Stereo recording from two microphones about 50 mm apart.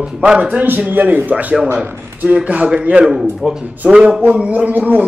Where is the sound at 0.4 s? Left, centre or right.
Right.